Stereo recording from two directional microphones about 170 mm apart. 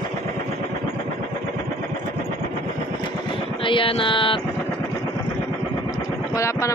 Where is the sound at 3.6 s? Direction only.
30° left (ahead or behind).